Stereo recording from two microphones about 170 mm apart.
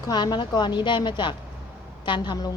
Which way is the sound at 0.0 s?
25° left (ahead or behind).